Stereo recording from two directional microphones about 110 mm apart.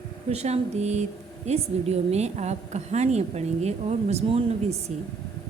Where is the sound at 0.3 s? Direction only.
75° right (ahead or behind).